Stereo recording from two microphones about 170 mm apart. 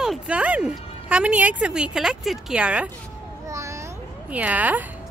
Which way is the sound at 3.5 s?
15° right (ahead or behind).